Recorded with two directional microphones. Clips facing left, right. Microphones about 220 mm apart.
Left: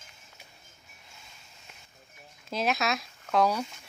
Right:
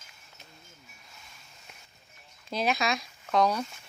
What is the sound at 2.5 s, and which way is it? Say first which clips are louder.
Speech: even; centre (ahead or behind).